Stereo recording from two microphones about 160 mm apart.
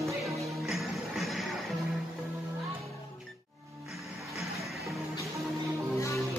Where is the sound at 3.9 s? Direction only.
Centre (ahead or behind).